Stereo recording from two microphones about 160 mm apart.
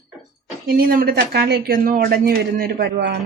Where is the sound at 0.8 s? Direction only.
65° right (ahead or behind); by 3.1 s 90° right.